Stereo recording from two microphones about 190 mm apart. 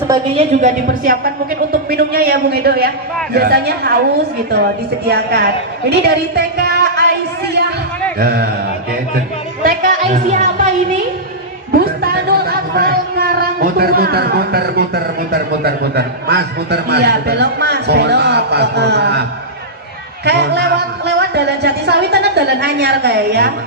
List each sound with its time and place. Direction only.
0.1 s a woman's voice: 35° right (ahead or behind); by 4.0 s 55° right (ahead or behind)
5.0 s a woman's voice: 60° right (ahead or behind)
8.2 s a woman's voice: 55° right (ahead or behind)
9.1 s music: 50° right (ahead or behind)
11.7 s a sound: 55° right (ahead or behind)
15.3 s a man's voice: 55° right (ahead or behind)
20.2 s a man's voice: 65° right (ahead or behind)